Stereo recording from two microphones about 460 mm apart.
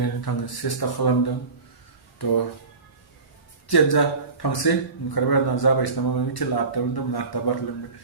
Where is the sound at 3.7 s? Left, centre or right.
Left.